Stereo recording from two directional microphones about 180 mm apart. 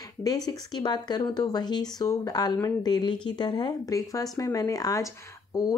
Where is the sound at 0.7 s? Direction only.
25° left (ahead or behind).